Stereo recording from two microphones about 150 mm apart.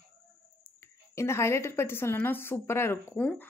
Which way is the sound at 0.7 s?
20° left (ahead or behind).